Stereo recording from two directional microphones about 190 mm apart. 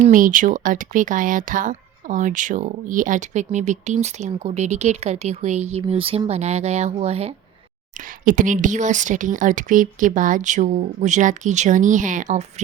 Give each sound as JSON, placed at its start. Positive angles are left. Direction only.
{"t": 0.0, "sound": "speech", "side_deg": -45}
{"t": 7.9, "sound": "speech", "side_deg": -45}